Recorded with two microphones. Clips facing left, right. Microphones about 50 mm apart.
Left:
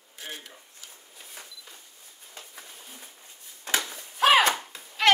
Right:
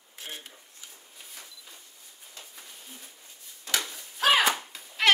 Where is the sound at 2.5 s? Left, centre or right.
Left.